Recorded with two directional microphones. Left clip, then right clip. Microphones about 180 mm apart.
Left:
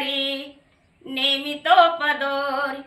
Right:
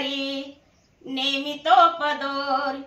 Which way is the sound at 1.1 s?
15° left (ahead or behind).